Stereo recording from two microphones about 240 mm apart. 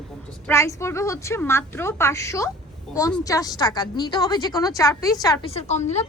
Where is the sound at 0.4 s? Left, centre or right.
Centre.